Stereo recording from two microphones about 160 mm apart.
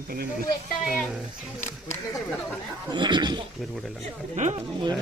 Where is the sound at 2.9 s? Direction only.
30° right (ahead or behind).